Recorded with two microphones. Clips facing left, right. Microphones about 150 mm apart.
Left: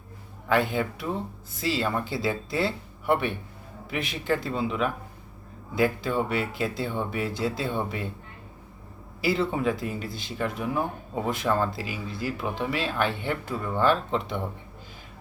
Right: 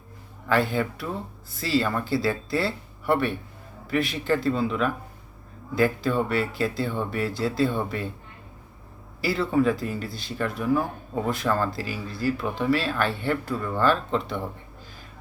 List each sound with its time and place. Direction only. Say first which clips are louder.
0.4 s speech: right 1 dB; 15° left (ahead or behind)
9.2 s speech: right 2 dB; 20° left (ahead or behind)